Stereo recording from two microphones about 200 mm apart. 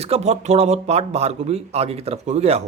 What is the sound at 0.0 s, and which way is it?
Speech, 30° right (ahead or behind).